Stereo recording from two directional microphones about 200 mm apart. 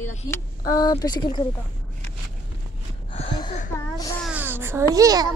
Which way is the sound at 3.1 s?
30° left (ahead or behind).